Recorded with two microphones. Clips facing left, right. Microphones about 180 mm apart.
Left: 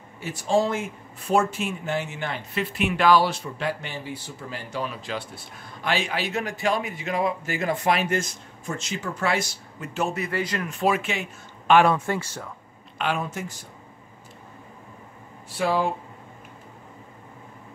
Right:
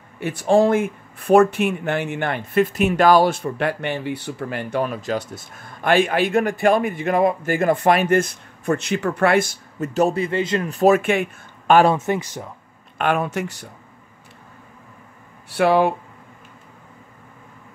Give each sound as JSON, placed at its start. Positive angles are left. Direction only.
{"t": 0.2, "sound": "speech", "side_deg": -60}
{"t": 10.7, "sound": "speech", "side_deg": -45}
{"t": 11.9, "sound": "speech", "side_deg": -20}
{"t": 12.9, "sound": "speech", "side_deg": -55}
{"t": 15.5, "sound": "speech", "side_deg": -65}